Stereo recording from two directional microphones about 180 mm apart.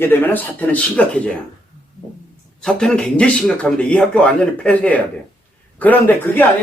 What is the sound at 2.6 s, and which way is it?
Speech, 5° left (ahead or behind).